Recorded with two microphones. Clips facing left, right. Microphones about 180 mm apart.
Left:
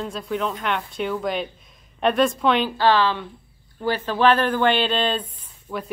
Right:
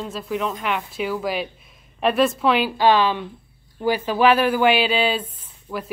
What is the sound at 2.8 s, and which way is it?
Speech, 15° right (ahead or behind).